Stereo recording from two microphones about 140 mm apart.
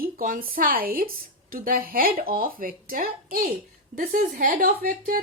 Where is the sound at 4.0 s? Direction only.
75° right (ahead or behind).